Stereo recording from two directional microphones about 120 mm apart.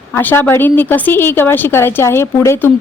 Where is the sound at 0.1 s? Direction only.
15° left (ahead or behind).